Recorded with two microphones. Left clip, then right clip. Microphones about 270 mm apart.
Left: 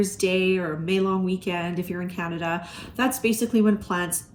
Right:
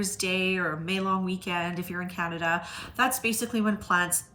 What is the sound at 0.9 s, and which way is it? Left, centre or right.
Speech, right.